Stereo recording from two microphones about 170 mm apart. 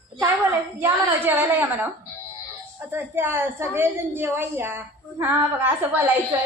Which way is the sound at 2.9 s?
15° right (ahead or behind).